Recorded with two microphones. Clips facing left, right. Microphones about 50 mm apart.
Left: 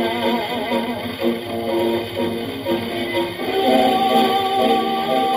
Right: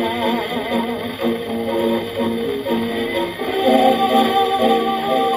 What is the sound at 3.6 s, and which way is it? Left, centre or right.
Music, left.